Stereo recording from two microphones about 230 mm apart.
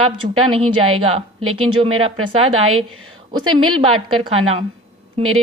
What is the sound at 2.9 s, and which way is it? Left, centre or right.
Speech, right.